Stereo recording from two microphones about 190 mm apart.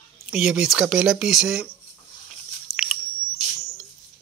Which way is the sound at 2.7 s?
5° right (ahead or behind).